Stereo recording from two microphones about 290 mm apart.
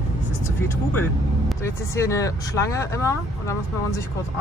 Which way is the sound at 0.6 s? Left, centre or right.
Centre.